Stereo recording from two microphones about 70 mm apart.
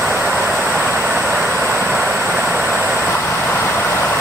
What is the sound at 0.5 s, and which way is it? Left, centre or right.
Vehicle, centre.